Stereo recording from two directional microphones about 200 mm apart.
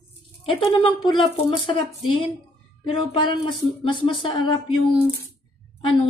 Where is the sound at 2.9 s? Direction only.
25° left (ahead or behind).